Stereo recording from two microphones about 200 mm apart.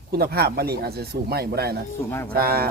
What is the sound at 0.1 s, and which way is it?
Speech, 50° right (ahead or behind).